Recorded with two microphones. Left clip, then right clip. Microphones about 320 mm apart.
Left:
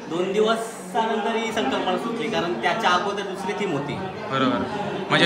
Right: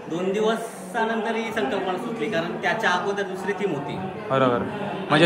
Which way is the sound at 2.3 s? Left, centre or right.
Centre.